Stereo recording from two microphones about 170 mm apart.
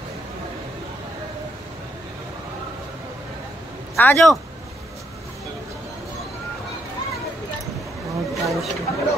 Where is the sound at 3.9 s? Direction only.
15° left (ahead or behind).